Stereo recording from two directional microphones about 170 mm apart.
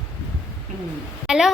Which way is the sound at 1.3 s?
5° right (ahead or behind).